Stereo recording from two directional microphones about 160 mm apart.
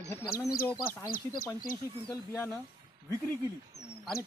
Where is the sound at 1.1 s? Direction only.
60° left (ahead or behind).